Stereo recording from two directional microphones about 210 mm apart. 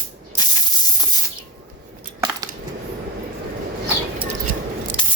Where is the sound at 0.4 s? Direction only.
20° left (ahead or behind).